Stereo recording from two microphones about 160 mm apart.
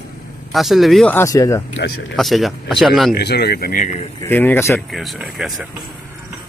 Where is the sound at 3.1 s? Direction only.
85° left; by 3.8 s 65° left (ahead or behind).